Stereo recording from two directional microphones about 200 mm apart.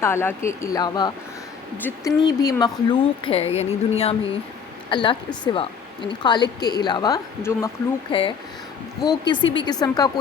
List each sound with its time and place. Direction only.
0.0 s a woman's voice: 10° left (ahead or behind)
9.0 s a woman's voice: 20° left (ahead or behind)